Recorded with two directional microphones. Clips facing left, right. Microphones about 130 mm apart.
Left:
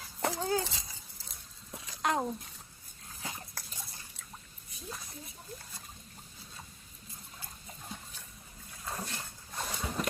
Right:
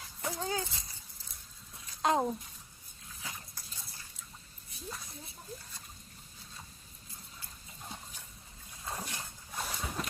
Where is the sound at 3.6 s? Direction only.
80° left.